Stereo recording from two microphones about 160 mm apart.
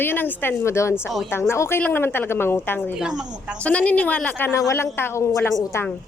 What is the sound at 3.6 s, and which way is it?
A woman's voice, 10° left (ahead or behind).